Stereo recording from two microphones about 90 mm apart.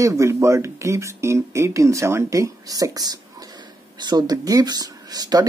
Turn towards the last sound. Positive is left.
turn(degrees=-45)  # may be behind; listen again after turning